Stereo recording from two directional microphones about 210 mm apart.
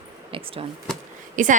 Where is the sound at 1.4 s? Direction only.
40° right (ahead or behind).